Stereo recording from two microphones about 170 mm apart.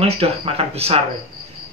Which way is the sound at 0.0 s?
35° right (ahead or behind).